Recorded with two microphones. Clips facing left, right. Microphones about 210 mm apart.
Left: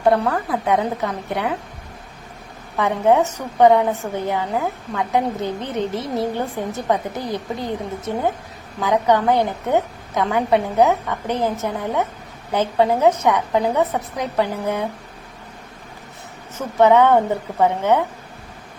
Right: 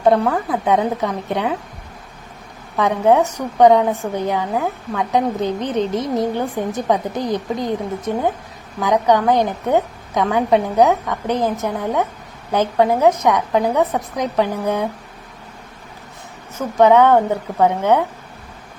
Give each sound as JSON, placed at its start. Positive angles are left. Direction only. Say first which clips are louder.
{"t": 0.1, "sound": "a woman's voice", "louder": "right 2 dB", "side_deg": -20}
{"t": 2.7, "sound": "a woman's voice", "louder": "right 2 dB", "side_deg": -15}
{"t": 16.6, "sound": "a woman's voice", "louder": "right 2 dB", "side_deg": -15}